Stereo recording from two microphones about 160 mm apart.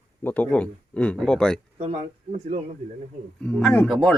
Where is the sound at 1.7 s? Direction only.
45° right (ahead or behind).